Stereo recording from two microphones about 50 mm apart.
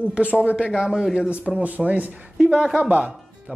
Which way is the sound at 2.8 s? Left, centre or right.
Right.